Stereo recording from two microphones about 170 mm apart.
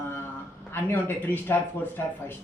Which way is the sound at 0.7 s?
10° left (ahead or behind).